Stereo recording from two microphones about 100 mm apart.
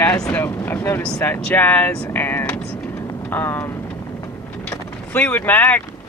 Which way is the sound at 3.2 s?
20° left (ahead or behind).